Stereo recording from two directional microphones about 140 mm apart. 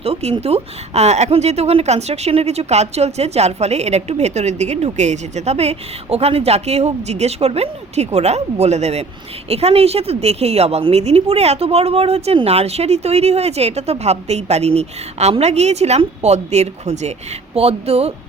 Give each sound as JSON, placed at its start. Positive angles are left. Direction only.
{"t": 0.0, "sound": "a woman's voice", "side_deg": -45}